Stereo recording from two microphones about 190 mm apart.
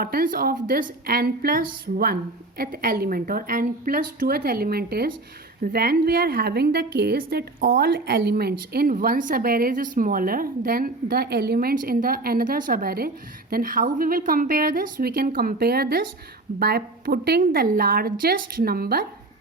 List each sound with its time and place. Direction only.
0.0 s a woman's voice: 50° right (ahead or behind)